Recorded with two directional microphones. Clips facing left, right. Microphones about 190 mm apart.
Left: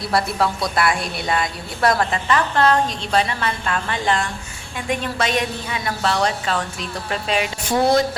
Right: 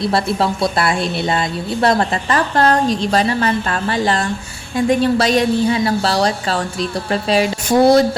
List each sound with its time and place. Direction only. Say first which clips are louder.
0.0 s speech: right 3 dB; 25° right (ahead or behind)
2.3 s a woman's voice: right 2 dB; 40° right (ahead or behind)